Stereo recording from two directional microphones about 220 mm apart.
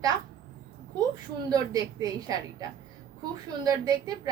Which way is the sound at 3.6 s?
15° right (ahead or behind).